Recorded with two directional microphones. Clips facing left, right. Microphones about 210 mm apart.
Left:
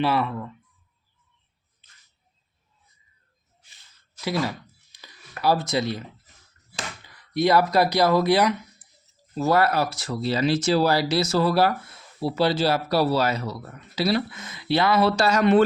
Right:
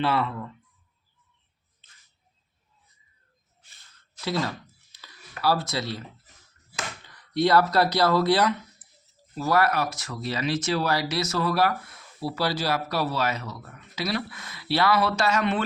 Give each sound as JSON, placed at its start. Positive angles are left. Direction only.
{"t": 0.0, "sound": "speech", "side_deg": 15}
{"t": 4.2, "sound": "computer keyboard", "side_deg": 10}
{"t": 7.1, "sound": "speech", "side_deg": 10}
{"t": 9.4, "sound": "speech", "side_deg": 25}